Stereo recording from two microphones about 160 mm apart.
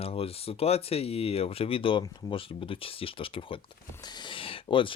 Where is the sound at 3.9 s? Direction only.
25° left (ahead or behind).